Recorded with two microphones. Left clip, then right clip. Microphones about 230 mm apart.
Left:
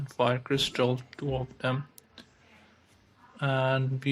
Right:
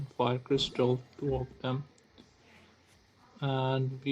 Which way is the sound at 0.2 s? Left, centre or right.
Left.